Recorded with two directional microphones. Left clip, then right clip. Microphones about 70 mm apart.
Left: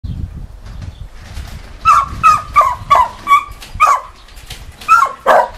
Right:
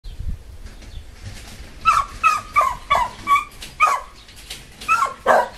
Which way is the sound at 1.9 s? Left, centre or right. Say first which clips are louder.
Left 8 dB; left.